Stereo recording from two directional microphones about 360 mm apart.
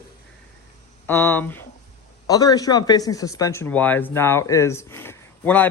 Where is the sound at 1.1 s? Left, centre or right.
Centre.